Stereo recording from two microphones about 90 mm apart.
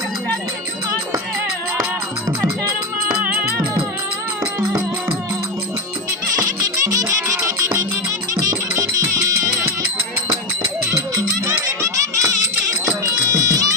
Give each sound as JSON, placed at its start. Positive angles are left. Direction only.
{"t": 6.4, "sound": "music", "side_deg": -40}
{"t": 10.8, "sound": "music", "side_deg": -40}